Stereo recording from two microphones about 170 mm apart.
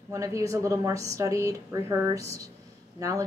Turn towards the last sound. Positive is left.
turn(degrees=-20)  # may be behind; listen again after turning